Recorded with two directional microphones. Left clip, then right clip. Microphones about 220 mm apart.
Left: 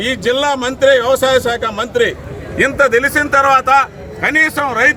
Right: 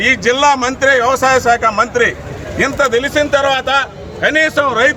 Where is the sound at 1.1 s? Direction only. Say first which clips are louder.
Even; 20° left (ahead or behind).